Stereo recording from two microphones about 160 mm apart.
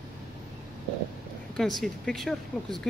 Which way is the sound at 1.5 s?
Centre (ahead or behind).